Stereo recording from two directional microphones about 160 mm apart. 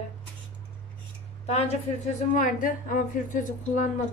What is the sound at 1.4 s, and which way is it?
A woman's voice, 45° left (ahead or behind).